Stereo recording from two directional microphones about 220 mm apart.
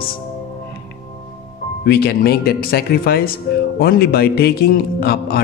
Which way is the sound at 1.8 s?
45° left (ahead or behind).